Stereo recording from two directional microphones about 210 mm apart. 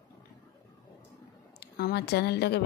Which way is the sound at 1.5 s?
50° left (ahead or behind).